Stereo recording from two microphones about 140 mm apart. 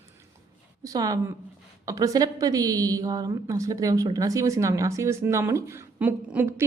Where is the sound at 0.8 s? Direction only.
25° right (ahead or behind).